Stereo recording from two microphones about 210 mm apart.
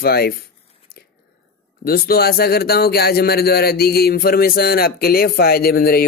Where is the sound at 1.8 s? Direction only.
45° left (ahead or behind).